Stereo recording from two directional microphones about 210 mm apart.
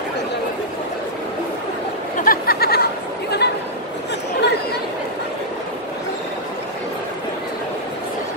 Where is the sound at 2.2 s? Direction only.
45° left (ahead or behind).